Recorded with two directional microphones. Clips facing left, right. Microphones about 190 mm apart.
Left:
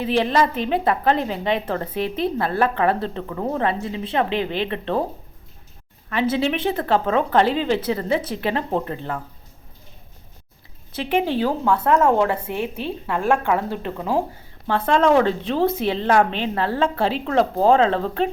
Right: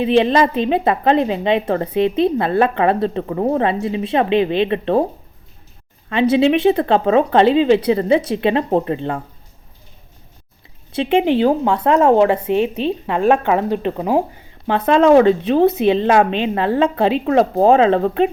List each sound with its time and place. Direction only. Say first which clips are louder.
0.0 s a woman's voice: right 5 dB; 20° right (ahead or behind)
3.2 s a woman's voice: right 7 dB; 30° right (ahead or behind)
3.6 s a woman's voice: right 5 dB; 20° right (ahead or behind)
6.4 s a woman's voice: right 8 dB; 20° right (ahead or behind)
10.9 s a woman's voice: right 6 dB; 25° right (ahead or behind)